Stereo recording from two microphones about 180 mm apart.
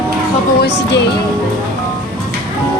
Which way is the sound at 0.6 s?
75° left (ahead or behind).